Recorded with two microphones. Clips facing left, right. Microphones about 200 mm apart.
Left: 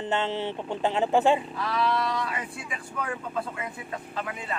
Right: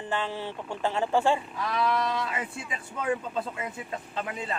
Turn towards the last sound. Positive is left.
turn(degrees=-25)  # may be behind; listen again after turning